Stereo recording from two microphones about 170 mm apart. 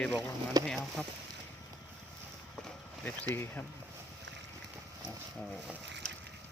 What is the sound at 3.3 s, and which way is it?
Speech, 10° left (ahead or behind).